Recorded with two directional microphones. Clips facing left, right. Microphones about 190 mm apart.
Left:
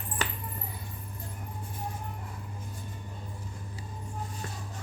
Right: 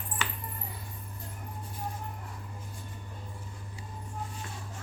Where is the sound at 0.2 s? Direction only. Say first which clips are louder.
Left 3 dB; 40° left (ahead or behind).